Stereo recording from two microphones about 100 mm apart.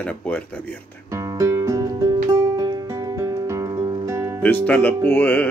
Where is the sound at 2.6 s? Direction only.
45° right (ahead or behind).